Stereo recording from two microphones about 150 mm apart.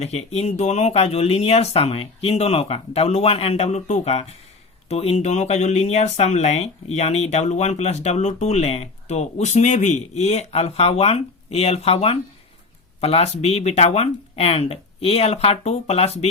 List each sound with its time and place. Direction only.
0.0 s speech: 45° left (ahead or behind)